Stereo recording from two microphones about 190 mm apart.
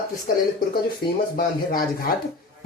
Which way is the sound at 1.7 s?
50° left (ahead or behind).